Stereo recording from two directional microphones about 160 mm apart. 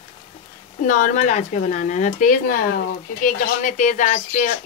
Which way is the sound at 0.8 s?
55° left (ahead or behind).